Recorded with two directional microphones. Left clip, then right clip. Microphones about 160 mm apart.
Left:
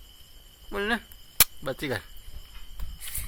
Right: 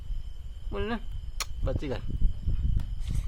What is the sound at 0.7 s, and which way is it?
Speech, 5° left (ahead or behind).